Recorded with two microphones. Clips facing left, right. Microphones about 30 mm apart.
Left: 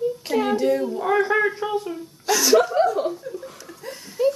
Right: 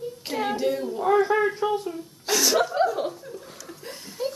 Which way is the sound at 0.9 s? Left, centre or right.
Centre.